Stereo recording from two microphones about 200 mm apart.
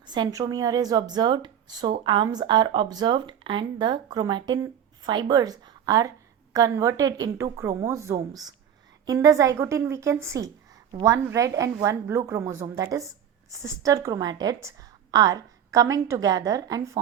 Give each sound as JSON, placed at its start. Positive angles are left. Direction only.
{"t": 0.0, "sound": "a woman's voice", "side_deg": -20}